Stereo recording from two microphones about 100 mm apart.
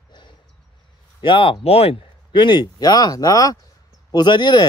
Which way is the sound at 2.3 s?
50° left (ahead or behind).